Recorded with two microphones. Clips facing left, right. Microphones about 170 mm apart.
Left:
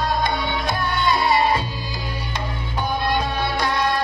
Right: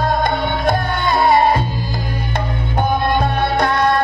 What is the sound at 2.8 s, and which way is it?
Music, 55° right (ahead or behind).